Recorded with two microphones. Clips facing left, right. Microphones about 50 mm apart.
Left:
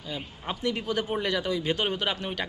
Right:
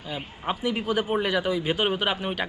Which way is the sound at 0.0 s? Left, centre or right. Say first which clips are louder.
Right 4 dB; centre.